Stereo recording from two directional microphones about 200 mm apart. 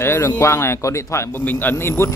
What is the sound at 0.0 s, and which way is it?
A man's voice, 10° left (ahead or behind).